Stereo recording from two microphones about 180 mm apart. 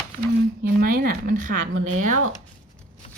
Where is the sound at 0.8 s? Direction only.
50° right (ahead or behind).